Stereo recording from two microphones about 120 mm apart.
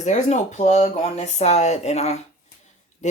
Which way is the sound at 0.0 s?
85° left.